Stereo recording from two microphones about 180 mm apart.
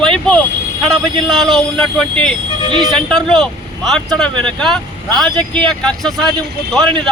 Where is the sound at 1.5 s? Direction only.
5° left (ahead or behind).